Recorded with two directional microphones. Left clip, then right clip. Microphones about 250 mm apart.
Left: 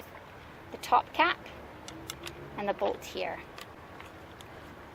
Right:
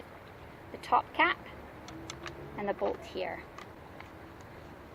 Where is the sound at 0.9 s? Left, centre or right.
Left.